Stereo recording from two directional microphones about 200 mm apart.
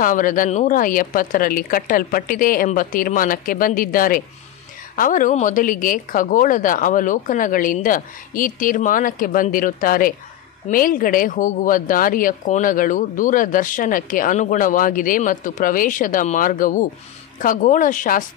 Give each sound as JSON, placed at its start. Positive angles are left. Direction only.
{"t": 0.0, "sound": "speech", "side_deg": 40}